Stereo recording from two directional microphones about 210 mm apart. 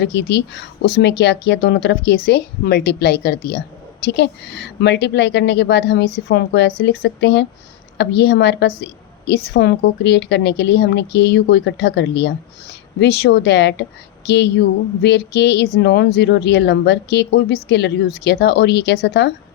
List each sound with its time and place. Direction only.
0.0 s a woman's voice: 55° left (ahead or behind)